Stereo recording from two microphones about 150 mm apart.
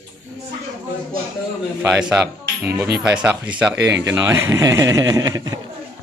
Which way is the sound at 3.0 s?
5° right (ahead or behind).